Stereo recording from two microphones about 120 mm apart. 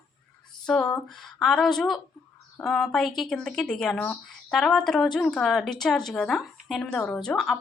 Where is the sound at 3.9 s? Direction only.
20° left (ahead or behind).